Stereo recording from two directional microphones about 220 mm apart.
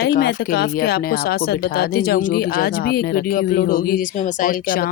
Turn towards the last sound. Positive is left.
turn(degrees=40)  # may be behind; listen again after turning